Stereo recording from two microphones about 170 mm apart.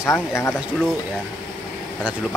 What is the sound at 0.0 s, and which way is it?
Speech, 15° left (ahead or behind).